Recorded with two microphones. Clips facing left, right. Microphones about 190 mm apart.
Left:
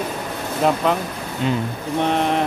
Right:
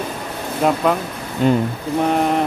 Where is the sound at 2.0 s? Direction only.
5° right (ahead or behind).